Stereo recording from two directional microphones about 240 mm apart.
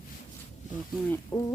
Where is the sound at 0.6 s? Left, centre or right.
Left.